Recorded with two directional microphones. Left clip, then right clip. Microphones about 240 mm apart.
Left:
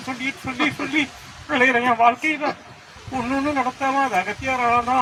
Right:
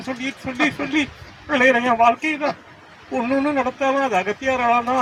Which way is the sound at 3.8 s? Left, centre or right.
Right.